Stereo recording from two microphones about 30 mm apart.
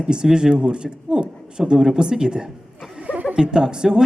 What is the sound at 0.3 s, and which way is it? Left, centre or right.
A man's voice, right.